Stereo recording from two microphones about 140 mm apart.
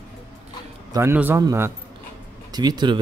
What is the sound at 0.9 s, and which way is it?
Speech, 15° right (ahead or behind).